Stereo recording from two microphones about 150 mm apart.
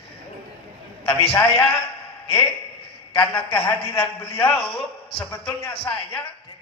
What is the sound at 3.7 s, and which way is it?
Speech, 15° left (ahead or behind).